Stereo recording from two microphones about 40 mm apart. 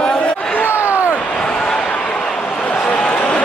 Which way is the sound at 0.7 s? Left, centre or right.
Left.